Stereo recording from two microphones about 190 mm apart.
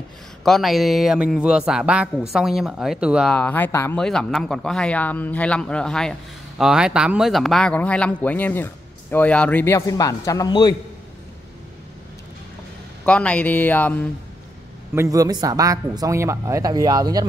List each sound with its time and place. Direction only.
0.5 s a man's voice: centre (ahead or behind)
3.3 s a man's voice: 10° left (ahead or behind)
13.0 s a man's voice: 5° left (ahead or behind)
15.0 s speech: 20° right (ahead or behind)